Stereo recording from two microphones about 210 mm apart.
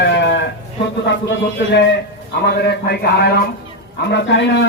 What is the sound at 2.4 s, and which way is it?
A man's voice, 50° left (ahead or behind).